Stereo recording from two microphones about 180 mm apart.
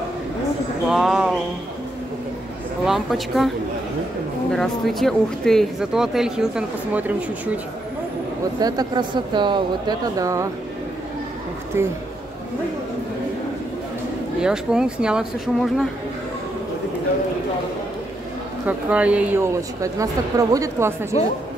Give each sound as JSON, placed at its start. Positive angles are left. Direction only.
{"t": 0.8, "sound": "speech", "side_deg": 0}
{"t": 2.9, "sound": "speech", "side_deg": 0}
{"t": 8.5, "sound": "speech", "side_deg": -20}
{"t": 14.4, "sound": "speech", "side_deg": -5}
{"t": 18.7, "sound": "a woman's voice", "side_deg": -5}